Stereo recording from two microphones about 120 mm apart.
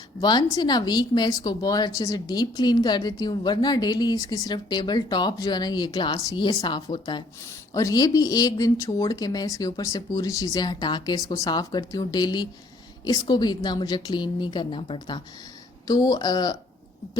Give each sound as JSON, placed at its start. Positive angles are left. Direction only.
{"t": 0.2, "sound": "speech", "side_deg": 35}